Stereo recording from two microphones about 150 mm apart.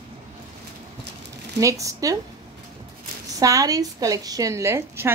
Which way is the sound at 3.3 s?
25° right (ahead or behind).